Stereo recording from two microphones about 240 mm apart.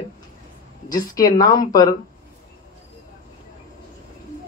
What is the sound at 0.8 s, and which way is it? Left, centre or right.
Speech, centre.